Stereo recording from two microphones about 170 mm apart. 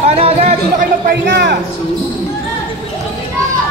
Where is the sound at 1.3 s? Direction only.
70° right (ahead or behind).